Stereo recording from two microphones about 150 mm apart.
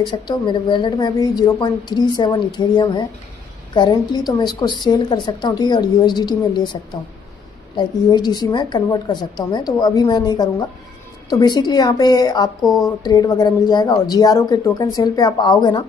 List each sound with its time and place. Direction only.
0.0 s a woman's voice: 30° left (ahead or behind)